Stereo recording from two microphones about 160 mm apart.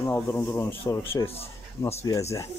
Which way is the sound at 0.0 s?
15° left (ahead or behind).